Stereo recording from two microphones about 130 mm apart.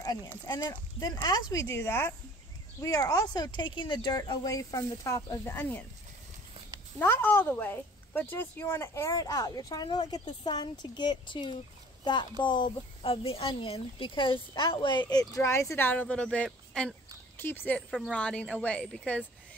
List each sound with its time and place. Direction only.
0.0 s livestock: 30° left (ahead or behind)
0.5 s a woman's voice: 35° left (ahead or behind); by 5.9 s 15° left (ahead or behind)
7.0 s speech: 15° left (ahead or behind); by 12.3 s 35° left (ahead or behind)
13.0 s a woman's voice: 45° left (ahead or behind); by 19.2 s 10° left (ahead or behind)